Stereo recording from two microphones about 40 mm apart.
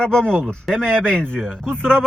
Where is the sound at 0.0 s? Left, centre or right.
Left.